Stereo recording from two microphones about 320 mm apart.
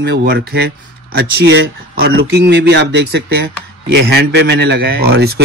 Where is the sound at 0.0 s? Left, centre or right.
Right.